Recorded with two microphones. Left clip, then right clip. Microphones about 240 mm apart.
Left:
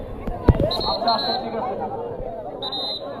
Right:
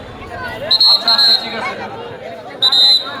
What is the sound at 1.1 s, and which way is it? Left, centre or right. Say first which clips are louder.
Chatter: right 10 dB; right.